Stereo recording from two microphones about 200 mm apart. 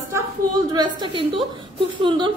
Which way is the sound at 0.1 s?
20° right (ahead or behind).